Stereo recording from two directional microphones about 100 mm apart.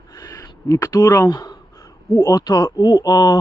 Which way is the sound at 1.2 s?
50° left (ahead or behind).